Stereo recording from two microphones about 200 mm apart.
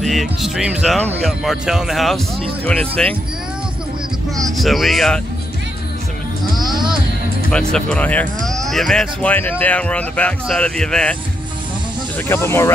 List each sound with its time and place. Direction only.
0.0 s speech: centre (ahead or behind)
4.6 s speech: centre (ahead or behind)
6.5 s speech: centre (ahead or behind)
12.3 s speech: 10° left (ahead or behind)